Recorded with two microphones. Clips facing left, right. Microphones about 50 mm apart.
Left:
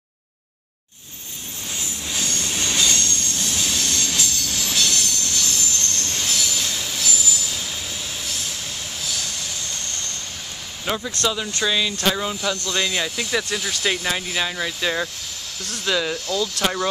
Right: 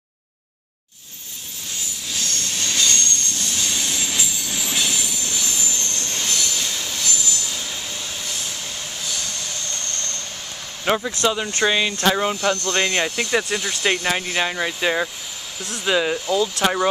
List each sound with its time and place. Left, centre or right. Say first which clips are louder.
2.1 s train: left 1 dB; centre
2.9 s train: even; centre
10.9 s speech: right 4 dB; right
13.1 s speech: right 3 dB; centre